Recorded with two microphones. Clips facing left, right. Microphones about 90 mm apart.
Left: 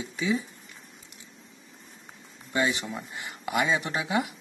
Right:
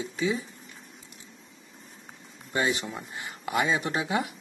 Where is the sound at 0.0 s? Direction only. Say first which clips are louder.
Even; 30° right (ahead or behind).